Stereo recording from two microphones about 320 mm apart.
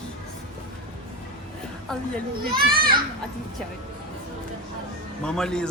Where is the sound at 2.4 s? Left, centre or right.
Right.